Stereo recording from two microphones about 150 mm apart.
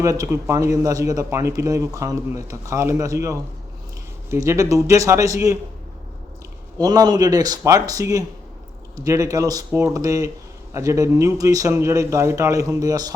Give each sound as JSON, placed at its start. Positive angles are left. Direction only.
{"t": 0.0, "sound": "speech", "side_deg": -20}
{"t": 6.7, "sound": "speech", "side_deg": -25}